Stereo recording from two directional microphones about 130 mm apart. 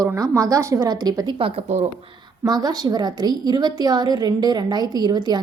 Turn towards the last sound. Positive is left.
turn(degrees=-35)  # may be behind; listen again after turning